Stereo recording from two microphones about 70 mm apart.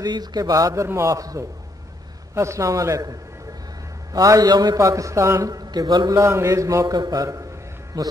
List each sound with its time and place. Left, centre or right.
0.0 s speech: right
0.8 s a man's voice: right
4.7 s a man's voice: right
5.4 s speech: right
6.1 s a man's voice: right
6.9 s a man's voice: right